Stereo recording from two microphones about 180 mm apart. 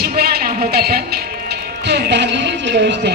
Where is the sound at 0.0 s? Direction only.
55° right (ahead or behind).